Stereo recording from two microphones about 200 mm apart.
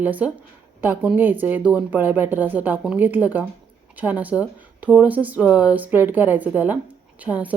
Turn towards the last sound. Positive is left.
turn(degrees=-5)  # may be behind; listen again after turning